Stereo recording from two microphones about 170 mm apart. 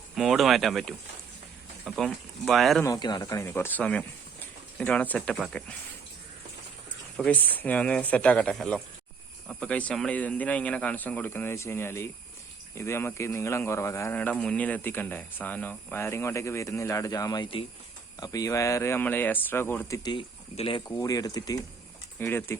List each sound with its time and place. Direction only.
0.2 s speech: centre (ahead or behind)
2.0 s speech: centre (ahead or behind)
2.8 s speech: 20° left (ahead or behind)
3.4 s speech: 15° left (ahead or behind)
7.2 s speech: 10° left (ahead or behind)
20.0 s speech: 25° left (ahead or behind)